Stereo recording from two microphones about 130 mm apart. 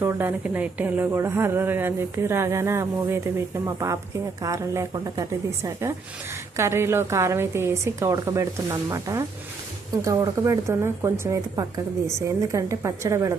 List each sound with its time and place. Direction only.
0.0 s speech: 20° right (ahead or behind)